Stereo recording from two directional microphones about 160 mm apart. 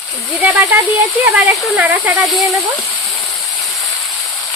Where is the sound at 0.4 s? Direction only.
10° right (ahead or behind).